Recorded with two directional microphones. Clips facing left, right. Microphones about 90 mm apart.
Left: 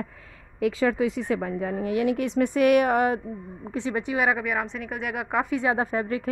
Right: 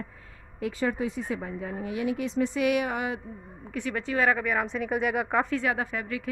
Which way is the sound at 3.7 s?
20° left (ahead or behind).